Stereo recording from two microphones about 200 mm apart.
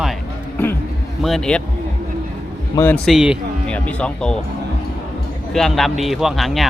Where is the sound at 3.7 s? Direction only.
5° left (ahead or behind).